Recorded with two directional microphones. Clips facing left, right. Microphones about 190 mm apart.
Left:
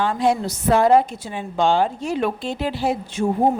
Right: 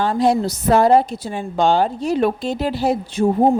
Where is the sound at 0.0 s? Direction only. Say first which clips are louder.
Right 3 dB; 35° right (ahead or behind).